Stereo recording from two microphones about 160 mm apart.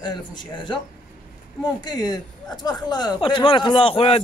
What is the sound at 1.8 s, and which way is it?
A man's voice, 25° left (ahead or behind).